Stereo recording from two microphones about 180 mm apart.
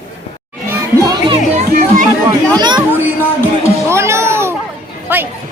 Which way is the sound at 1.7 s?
50° right (ahead or behind).